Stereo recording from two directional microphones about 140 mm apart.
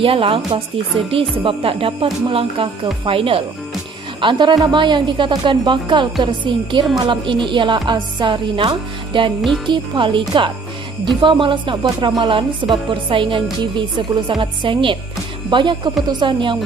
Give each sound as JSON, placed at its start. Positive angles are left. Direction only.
{"t": 0.0, "sound": "speech", "side_deg": -40}